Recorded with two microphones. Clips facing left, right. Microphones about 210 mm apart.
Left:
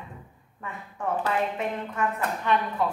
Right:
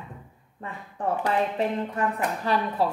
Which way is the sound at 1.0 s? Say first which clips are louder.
Right 2 dB; 35° right (ahead or behind).